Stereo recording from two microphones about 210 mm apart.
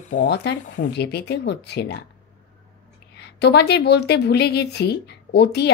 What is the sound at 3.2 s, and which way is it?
A woman's voice, 50° left (ahead or behind).